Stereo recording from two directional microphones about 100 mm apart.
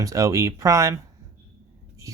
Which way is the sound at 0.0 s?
35° right (ahead or behind).